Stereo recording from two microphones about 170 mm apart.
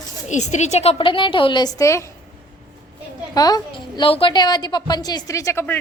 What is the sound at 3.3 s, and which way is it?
A woman's voice, 25° left (ahead or behind).